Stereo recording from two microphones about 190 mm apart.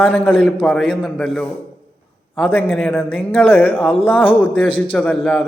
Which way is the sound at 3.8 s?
30° left (ahead or behind).